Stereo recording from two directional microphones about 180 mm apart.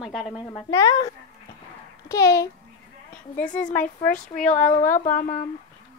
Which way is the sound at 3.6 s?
50° left (ahead or behind).